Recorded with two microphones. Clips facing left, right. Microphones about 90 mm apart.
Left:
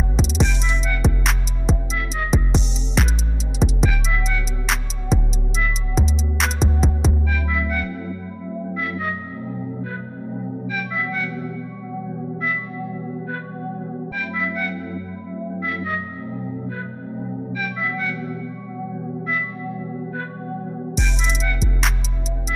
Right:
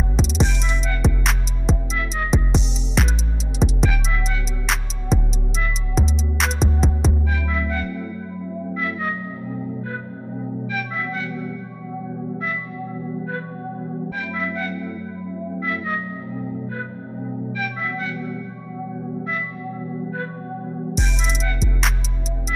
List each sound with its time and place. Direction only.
0.1 s music: centre (ahead or behind)
5.1 s music: centre (ahead or behind)
7.5 s music: 30° right (ahead or behind)
20.9 s music: centre (ahead or behind)